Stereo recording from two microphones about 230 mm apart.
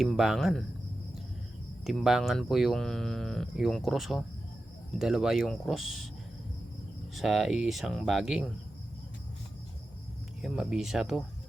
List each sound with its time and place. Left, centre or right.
0.0 s speech: centre
1.8 s speech: centre
7.2 s speech: centre
10.4 s speech: centre